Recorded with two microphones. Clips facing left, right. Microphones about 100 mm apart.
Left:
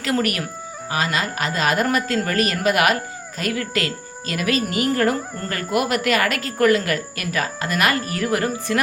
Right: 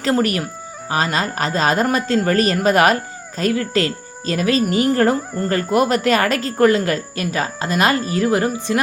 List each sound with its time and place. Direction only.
0.0 s a man's voice: 30° right (ahead or behind)